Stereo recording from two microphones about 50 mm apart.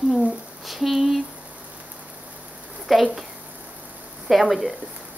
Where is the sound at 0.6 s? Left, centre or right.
Centre.